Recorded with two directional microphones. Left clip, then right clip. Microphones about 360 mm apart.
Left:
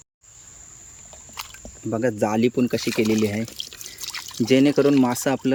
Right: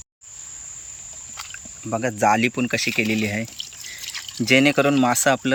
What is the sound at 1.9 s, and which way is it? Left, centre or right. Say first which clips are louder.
Speech: right 3 dB; centre.